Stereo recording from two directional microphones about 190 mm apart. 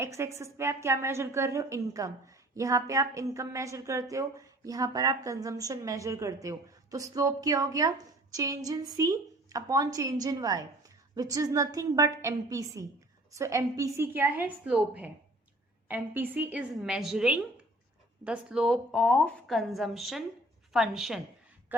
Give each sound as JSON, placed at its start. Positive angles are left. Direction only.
{"t": 0.0, "sound": "a woman's voice", "side_deg": -15}